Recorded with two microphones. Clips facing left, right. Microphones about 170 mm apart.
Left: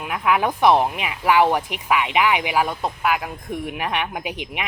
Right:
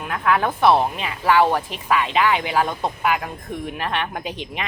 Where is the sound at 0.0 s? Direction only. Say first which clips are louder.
Even; 15° left (ahead or behind).